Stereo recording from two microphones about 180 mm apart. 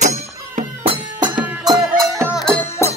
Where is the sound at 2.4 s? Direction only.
5° left (ahead or behind).